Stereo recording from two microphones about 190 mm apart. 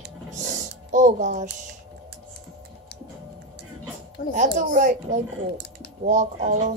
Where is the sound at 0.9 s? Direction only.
40° right (ahead or behind).